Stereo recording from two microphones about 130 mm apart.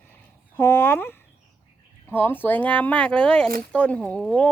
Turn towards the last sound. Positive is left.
turn(degrees=10)  # may be behind; listen again after turning